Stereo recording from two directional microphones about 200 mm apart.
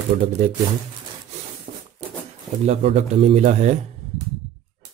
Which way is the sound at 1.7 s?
40° right (ahead or behind).